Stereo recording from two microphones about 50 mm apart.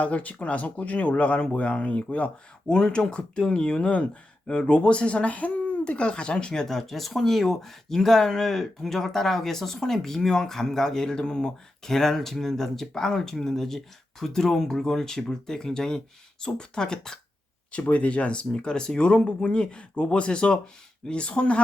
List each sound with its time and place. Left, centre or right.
0.0 s speech: left
2.6 s speech: centre
17.7 s speech: left